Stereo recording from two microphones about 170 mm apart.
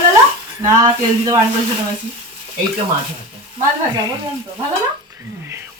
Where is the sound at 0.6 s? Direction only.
25° right (ahead or behind).